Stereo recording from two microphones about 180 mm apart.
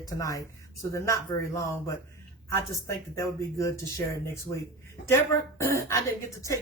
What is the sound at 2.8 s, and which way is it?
Speech, 15° left (ahead or behind).